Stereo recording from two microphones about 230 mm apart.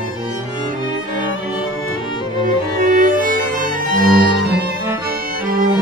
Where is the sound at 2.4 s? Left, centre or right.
Right.